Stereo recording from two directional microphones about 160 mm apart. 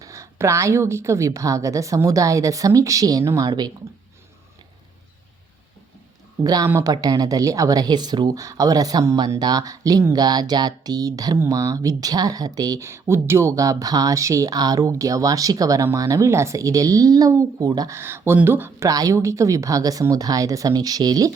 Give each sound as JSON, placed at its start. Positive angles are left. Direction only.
{"t": 0.0, "sound": "speech", "side_deg": -20}
{"t": 6.4, "sound": "speech", "side_deg": -25}